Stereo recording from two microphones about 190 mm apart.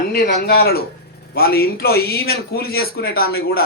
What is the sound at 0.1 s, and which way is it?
Speech, 55° left (ahead or behind).